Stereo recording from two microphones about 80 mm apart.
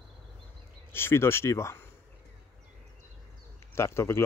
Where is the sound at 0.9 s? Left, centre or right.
Left.